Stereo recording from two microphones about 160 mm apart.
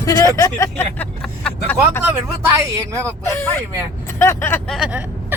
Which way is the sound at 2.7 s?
20° right (ahead or behind).